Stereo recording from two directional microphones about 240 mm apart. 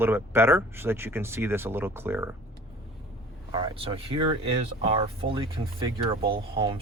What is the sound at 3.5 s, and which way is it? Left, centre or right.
Speech, right.